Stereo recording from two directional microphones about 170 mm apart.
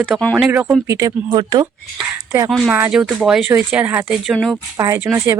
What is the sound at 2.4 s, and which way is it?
Speech, centre (ahead or behind).